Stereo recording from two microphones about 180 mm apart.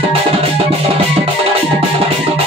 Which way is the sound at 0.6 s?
35° right (ahead or behind).